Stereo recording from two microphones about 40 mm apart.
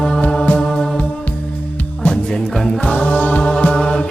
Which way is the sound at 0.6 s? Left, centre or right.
Centre.